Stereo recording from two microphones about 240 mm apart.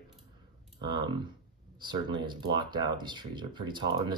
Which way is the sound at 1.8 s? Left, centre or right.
Centre.